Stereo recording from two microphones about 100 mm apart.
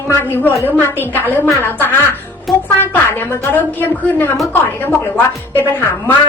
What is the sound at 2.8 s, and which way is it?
A woman's voice, 20° left (ahead or behind).